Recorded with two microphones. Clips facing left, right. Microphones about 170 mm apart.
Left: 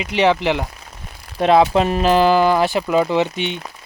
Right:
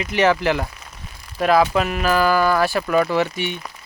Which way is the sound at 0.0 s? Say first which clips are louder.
Left 1 dB; 20° left (ahead or behind).